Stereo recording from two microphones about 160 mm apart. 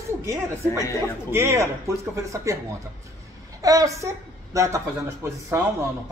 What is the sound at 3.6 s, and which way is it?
Speech, 20° right (ahead or behind).